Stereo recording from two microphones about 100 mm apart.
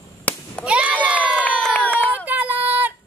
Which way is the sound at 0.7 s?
15° right (ahead or behind).